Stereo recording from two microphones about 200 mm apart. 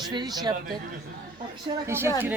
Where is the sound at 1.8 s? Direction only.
10° right (ahead or behind).